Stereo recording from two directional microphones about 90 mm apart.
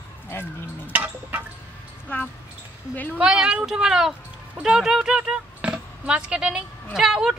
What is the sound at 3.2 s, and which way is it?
Speech, 10° right (ahead or behind).